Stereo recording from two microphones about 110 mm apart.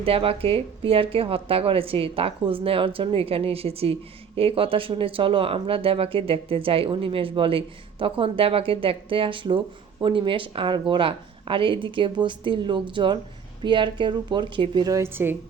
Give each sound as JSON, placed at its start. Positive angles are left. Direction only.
{"t": 0.0, "sound": "speech", "side_deg": -60}
{"t": 14.8, "sound": "a woman's voice", "side_deg": -30}
{"t": 15.1, "sound": "speech", "side_deg": -20}